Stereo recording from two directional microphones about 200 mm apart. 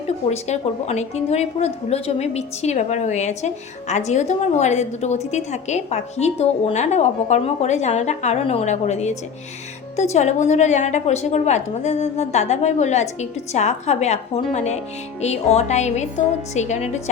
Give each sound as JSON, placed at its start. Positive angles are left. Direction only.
{"t": 0.3, "sound": "a woman's voice", "side_deg": 35}